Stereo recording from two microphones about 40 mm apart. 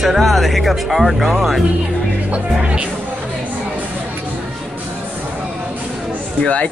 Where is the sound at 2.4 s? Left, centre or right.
Right.